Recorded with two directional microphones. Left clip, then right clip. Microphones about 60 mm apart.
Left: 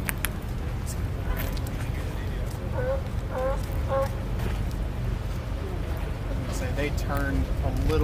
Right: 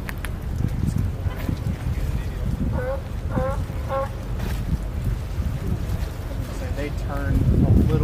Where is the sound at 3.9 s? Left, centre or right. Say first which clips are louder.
Right 1 dB; right.